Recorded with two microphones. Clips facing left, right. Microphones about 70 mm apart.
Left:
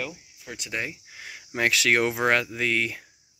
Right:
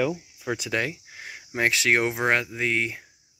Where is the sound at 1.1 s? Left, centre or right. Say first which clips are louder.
Right 1 dB; right.